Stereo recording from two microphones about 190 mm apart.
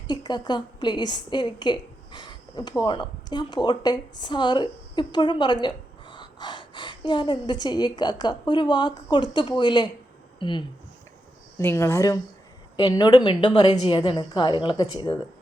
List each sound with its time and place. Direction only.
0.1 s a woman's voice: 20° left (ahead or behind)
11.5 s a woman's voice: 15° left (ahead or behind)